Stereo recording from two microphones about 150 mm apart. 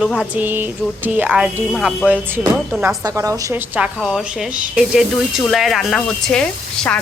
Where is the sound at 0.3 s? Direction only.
10° right (ahead or behind).